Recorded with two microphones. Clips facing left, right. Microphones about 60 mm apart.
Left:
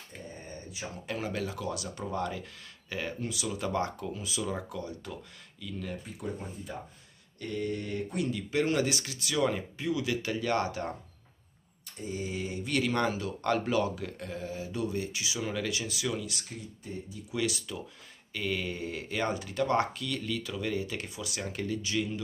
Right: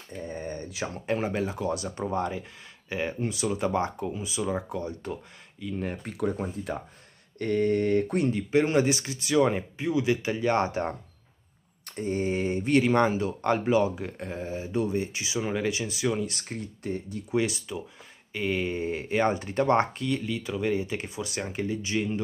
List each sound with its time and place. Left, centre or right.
0.3 s a sound: right
1.0 s speech: right
6.0 s speech: right
7.3 s speech: right
8.3 s speech: right
11.8 s speech: right
16.6 s speech: right
17.3 s speech: right